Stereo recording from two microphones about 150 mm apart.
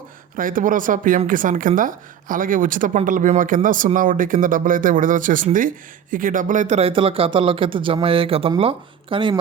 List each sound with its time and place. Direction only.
0.3 s speech: 65° right (ahead or behind); by 9.3 s 35° right (ahead or behind)